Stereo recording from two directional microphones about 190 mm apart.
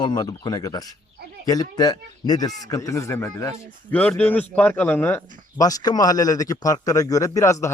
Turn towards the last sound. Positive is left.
turn(degrees=15)  # may be behind; listen again after turning